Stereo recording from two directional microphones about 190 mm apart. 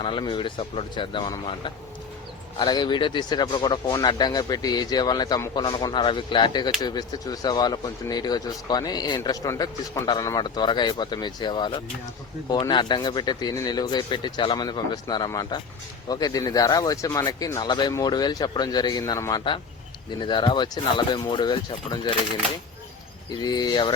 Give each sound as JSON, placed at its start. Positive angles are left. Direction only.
{"t": 0.0, "sound": "speech", "side_deg": 25}
{"t": 23.3, "sound": "speech", "side_deg": 20}